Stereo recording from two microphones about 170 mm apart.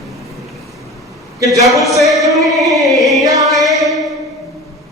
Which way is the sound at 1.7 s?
Centre (ahead or behind).